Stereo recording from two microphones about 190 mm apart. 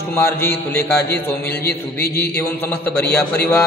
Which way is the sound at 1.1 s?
55° left (ahead or behind).